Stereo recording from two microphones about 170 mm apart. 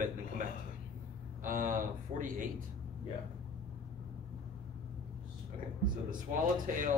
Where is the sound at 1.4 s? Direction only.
50° right (ahead or behind).